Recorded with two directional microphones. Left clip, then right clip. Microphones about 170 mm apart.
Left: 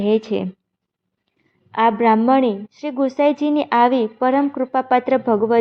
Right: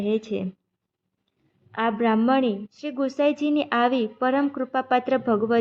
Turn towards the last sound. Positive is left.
turn(degrees=15)  # may be behind; listen again after turning